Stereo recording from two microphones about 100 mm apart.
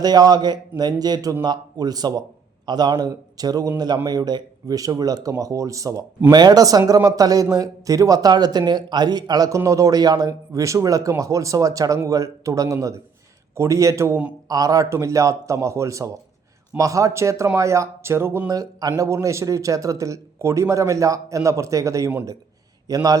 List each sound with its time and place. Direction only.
0.0 s speech: 40° right (ahead or behind); by 18.5 s 25° right (ahead or behind)
18.5 s speech: 40° right (ahead or behind)